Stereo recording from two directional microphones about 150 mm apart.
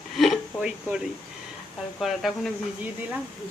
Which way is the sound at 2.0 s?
Centre (ahead or behind).